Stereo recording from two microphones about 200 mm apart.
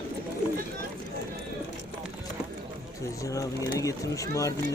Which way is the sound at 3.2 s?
15° left (ahead or behind).